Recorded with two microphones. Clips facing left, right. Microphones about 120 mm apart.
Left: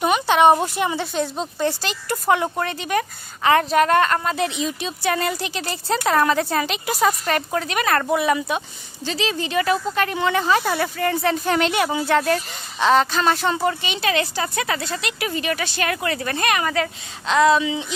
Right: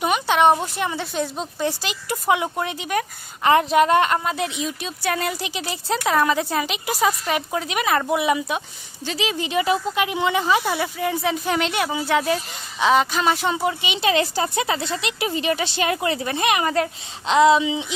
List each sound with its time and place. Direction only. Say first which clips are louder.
0.0 s a sound: left 2 dB; centre (ahead or behind)
0.5 s a woman's voice: left 3 dB; 10° left (ahead or behind)
3.4 s speech: right 1 dB; 20° right (ahead or behind)
4.2 s a woman's voice: left 2 dB; 5° right (ahead or behind)
14.0 s speech: right 2 dB; 30° right (ahead or behind)